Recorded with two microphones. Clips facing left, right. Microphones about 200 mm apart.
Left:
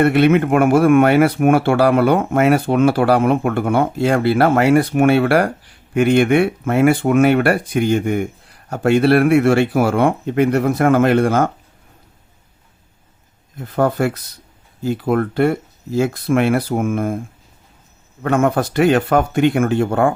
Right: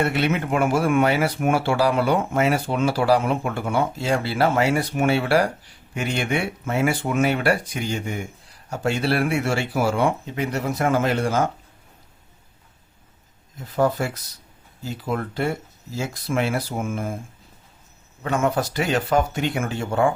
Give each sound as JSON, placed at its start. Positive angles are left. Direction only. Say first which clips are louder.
{"t": 0.0, "sound": "speech", "louder": "left 9 dB", "side_deg": 55}
{"t": 13.6, "sound": "speech", "louder": "left 4 dB", "side_deg": 55}
{"t": 18.2, "sound": "speech", "louder": "left 6 dB", "side_deg": 55}